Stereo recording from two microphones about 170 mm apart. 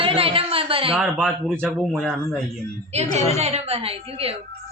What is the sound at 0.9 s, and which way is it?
Speech, 5° right (ahead or behind).